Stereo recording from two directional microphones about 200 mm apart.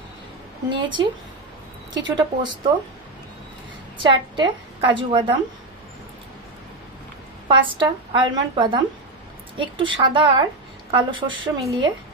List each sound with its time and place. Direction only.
0.7 s a woman's voice: 25° right (ahead or behind)
2.1 s a woman's voice: 20° right (ahead or behind)
4.0 s a woman's voice: 25° right (ahead or behind)
7.4 s a woman's voice: 25° right (ahead or behind)